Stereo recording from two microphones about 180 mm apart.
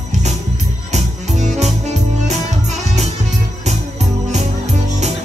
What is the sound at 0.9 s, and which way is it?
Music, 40° right (ahead or behind).